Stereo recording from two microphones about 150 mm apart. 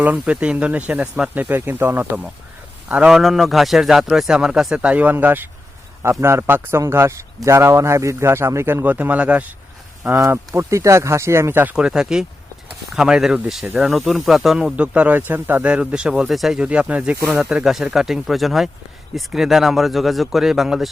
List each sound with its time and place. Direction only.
0.0 s a man's voice: 10° right (ahead or behind)